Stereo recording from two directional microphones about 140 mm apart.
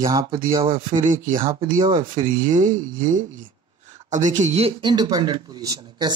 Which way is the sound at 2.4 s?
65° right (ahead or behind).